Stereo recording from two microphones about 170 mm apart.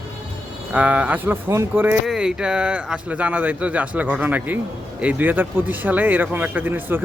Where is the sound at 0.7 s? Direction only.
10° right (ahead or behind).